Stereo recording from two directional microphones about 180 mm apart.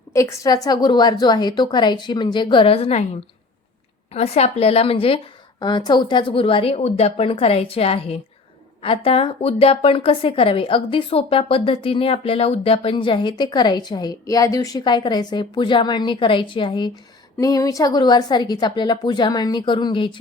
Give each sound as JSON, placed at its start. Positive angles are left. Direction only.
{"t": 0.1, "sound": "a woman's voice", "side_deg": 15}
{"t": 4.1, "sound": "a woman's voice", "side_deg": 35}